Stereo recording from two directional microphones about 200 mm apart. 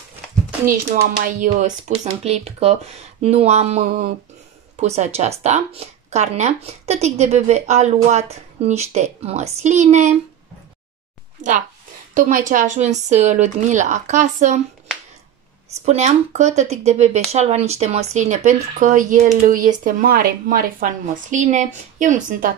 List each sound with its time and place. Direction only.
1.2 s speech: 40° right (ahead or behind)
11.4 s a sound: 40° right (ahead or behind)
12.1 s speech: 40° right (ahead or behind)
15.8 s speech: 35° right (ahead or behind)